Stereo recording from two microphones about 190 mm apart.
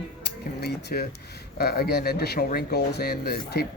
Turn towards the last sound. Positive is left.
turn(degrees=55)  # may be behind; listen again after turning